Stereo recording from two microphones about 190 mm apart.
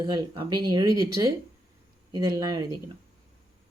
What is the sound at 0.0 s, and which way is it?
Speech, 25° right (ahead or behind).